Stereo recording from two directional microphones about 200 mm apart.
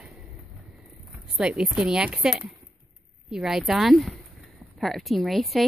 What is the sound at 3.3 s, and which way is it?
Speech, centre (ahead or behind).